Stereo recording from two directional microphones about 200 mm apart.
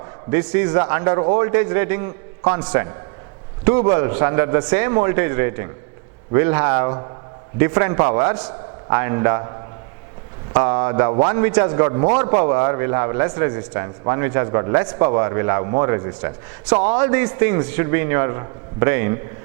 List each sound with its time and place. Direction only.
0.3 s a man's voice: 10° right (ahead or behind)